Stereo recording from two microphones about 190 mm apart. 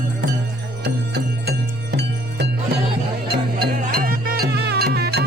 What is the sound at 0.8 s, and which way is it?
Music, 60° right (ahead or behind).